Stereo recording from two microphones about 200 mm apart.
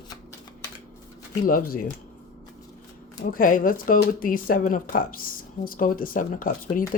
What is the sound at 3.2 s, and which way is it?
Speech, 45° left (ahead or behind).